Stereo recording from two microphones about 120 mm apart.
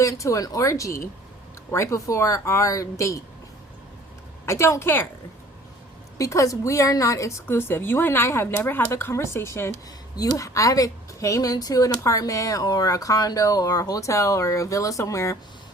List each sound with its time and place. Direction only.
0.0 s speech: 25° left (ahead or behind)
4.4 s speech: 25° left (ahead or behind)
6.1 s speech: 25° left (ahead or behind)